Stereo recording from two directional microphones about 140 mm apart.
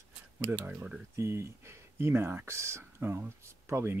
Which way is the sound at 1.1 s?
20° right (ahead or behind).